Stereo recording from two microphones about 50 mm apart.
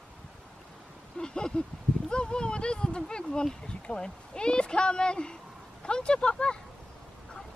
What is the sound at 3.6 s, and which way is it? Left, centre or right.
Speech, centre.